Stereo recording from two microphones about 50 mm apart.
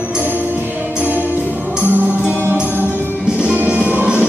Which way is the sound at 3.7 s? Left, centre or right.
Right.